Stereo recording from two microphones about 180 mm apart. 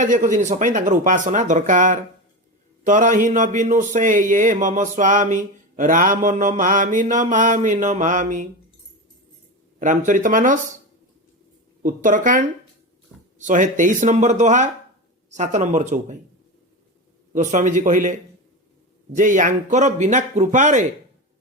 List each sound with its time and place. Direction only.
0.0 s a man's voice: 45° right (ahead or behind)
10.1 s a man's voice: 45° right (ahead or behind)
11.8 s a man's voice: 45° right (ahead or behind)
17.3 s a man's voice: 45° right (ahead or behind)